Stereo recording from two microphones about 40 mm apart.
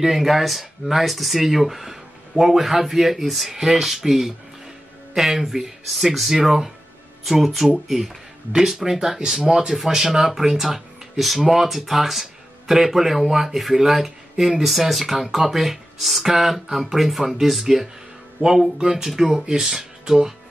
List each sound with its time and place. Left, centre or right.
0.0 s speech: centre
18.8 s speech: centre
19.6 s speech: centre